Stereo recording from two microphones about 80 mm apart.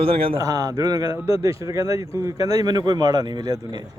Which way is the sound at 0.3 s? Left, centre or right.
Right.